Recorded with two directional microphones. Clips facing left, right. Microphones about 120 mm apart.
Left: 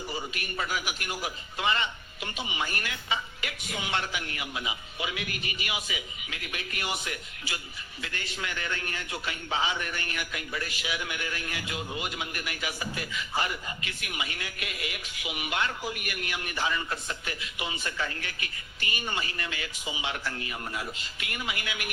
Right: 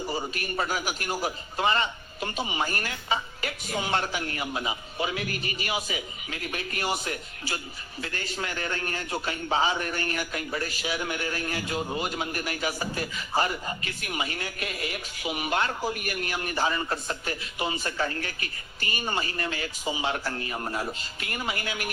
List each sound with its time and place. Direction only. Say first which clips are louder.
0.1 s a man's voice: right 5 dB; 40° right (ahead or behind)